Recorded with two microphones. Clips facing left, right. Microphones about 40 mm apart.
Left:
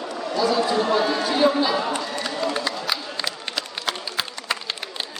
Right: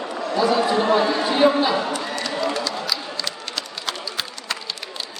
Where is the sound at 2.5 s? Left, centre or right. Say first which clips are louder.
Even; left.